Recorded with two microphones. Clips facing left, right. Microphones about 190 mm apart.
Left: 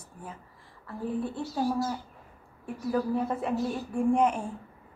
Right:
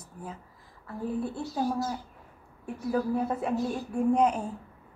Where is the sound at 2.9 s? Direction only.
10° right (ahead or behind).